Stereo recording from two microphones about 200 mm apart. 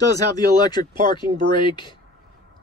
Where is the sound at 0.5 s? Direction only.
20° left (ahead or behind).